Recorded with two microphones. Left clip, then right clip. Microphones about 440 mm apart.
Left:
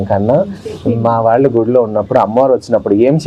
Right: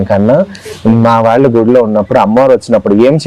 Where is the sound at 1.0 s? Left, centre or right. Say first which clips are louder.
Right 3 dB; right.